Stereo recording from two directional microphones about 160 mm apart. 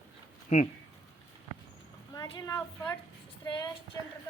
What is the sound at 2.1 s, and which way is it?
A woman's voice, 25° left (ahead or behind).